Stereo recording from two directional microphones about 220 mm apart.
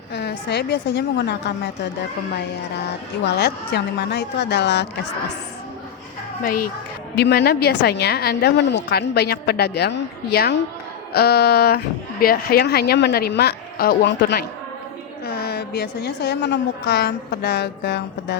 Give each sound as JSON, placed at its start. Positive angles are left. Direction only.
{"t": 0.1, "sound": "a woman's voice", "side_deg": 50}
{"t": 3.2, "sound": "a woman's voice", "side_deg": 50}
{"t": 7.2, "sound": "a woman's voice", "side_deg": 45}